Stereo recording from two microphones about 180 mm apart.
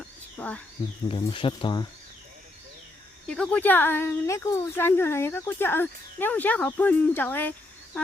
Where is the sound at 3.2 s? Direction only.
5° left (ahead or behind).